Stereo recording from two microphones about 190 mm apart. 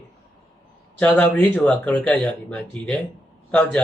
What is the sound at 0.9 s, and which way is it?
A man's voice, 5° left (ahead or behind).